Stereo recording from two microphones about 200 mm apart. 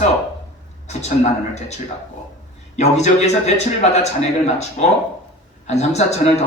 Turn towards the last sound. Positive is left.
turn(degrees=35)  # may be behind; listen again after turning